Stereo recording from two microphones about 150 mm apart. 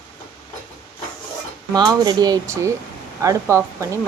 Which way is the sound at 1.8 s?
30° right (ahead or behind).